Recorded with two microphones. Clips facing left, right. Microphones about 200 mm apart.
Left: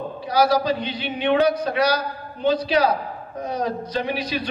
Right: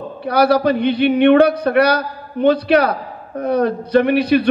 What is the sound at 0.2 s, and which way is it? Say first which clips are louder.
A man's voice: right 5 dB; 60° right (ahead or behind).